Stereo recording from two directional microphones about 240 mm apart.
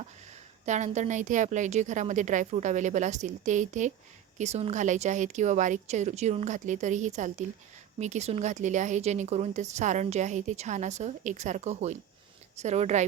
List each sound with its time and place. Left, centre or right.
0.6 s a woman's voice: right